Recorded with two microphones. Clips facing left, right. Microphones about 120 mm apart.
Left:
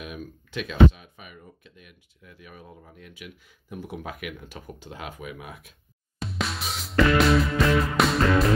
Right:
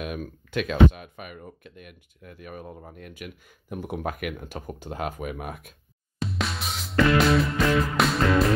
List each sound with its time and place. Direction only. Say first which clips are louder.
0.0 s speech: right 5 dB; 55° right (ahead or behind)
6.2 s music: right 1 dB; centre (ahead or behind)